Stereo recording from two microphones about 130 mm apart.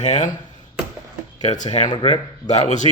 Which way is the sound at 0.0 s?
70° left (ahead or behind).